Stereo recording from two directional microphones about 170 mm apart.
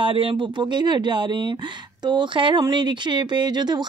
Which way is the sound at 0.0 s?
30° right (ahead or behind).